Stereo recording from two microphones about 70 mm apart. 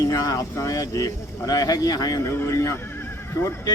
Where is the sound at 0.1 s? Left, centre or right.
Left.